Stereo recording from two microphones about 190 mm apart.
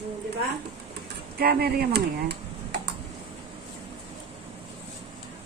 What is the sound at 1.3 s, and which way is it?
Speech, 55° right (ahead or behind).